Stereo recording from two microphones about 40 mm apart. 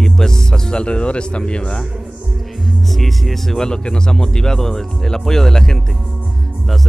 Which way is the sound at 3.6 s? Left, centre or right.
Centre.